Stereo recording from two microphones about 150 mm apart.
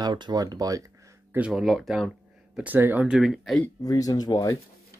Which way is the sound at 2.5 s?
10° right (ahead or behind).